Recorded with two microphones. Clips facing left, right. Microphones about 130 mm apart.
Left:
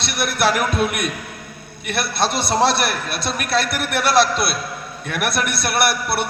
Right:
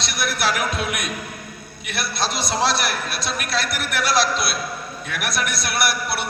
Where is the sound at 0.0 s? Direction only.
60° left (ahead or behind).